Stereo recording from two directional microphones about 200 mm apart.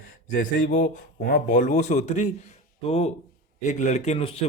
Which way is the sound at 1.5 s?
35° left (ahead or behind).